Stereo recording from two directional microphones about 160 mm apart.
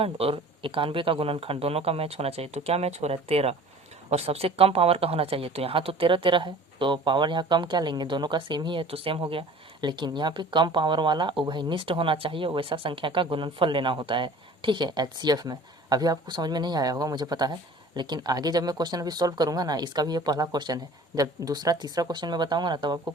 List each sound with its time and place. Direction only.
0.0 s speech: 35° right (ahead or behind)